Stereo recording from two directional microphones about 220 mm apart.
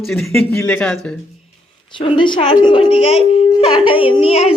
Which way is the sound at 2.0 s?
25° left (ahead or behind).